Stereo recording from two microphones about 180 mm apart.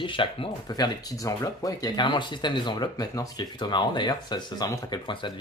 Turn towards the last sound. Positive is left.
turn(degrees=25)  # may be behind; listen again after turning